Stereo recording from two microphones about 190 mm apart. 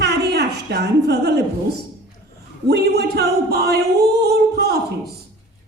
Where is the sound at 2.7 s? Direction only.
60° right (ahead or behind).